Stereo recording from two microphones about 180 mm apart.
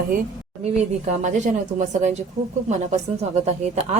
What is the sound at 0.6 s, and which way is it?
A woman's voice, 40° right (ahead or behind).